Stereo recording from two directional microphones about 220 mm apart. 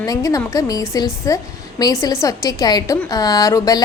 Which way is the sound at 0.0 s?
15° left (ahead or behind).